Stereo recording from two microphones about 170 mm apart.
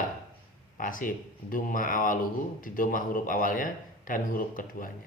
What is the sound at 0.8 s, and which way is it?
A man's voice, 55° left (ahead or behind).